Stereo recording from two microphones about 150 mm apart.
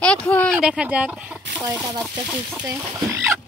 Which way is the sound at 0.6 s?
5° right (ahead or behind).